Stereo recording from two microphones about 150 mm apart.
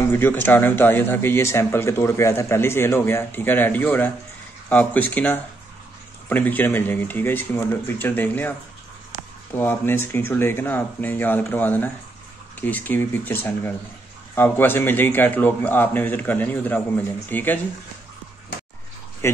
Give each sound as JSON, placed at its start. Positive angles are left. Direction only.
{"t": 0.1, "sound": "speech", "side_deg": 15}
{"t": 19.2, "sound": "speech", "side_deg": 20}